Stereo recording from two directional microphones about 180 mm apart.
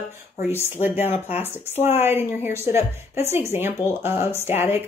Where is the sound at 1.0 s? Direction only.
10° right (ahead or behind).